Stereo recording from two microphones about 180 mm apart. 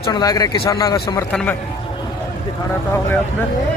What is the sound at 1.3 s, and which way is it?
Speech, 5° left (ahead or behind).